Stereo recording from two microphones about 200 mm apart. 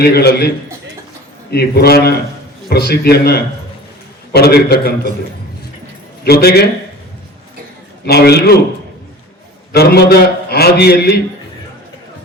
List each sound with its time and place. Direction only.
0.0 s a man's voice: 50° left (ahead or behind)
6.2 s a man's voice: 50° left (ahead or behind)
8.0 s a man's voice: 55° left (ahead or behind)
9.7 s a man's voice: 50° left (ahead or behind)